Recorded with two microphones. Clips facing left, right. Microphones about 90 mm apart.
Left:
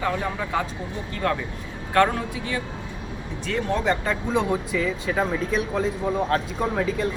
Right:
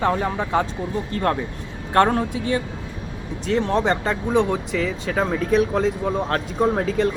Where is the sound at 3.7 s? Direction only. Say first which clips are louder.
Right 1 dB; 40° right (ahead or behind).